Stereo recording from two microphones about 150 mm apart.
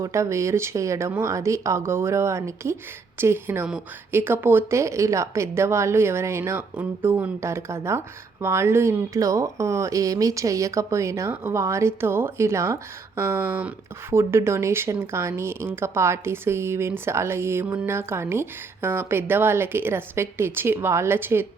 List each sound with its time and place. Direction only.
0.0 s a woman's voice: 20° right (ahead or behind)